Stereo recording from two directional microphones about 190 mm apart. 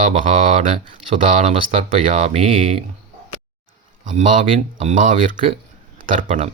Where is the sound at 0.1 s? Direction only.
30° right (ahead or behind).